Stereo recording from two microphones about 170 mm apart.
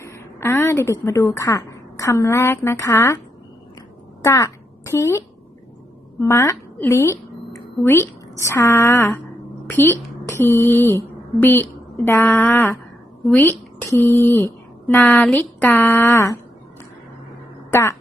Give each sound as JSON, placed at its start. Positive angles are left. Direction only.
{"t": 0.0, "sound": "a woman's voice", "side_deg": 15}
{"t": 4.2, "sound": "a sound", "side_deg": 15}
{"t": 6.2, "sound": "a woman's voice", "side_deg": 20}
{"t": 17.7, "sound": "a woman's voice", "side_deg": 15}